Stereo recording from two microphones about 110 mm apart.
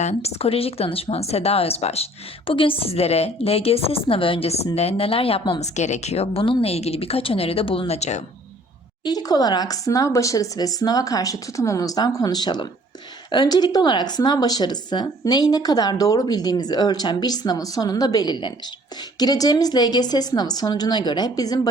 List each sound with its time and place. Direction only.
0.0 s speech: 80° left
2.5 s a woman's voice: 55° left (ahead or behind)
7.9 s speech: 90° left
9.0 s speech: 35° left (ahead or behind)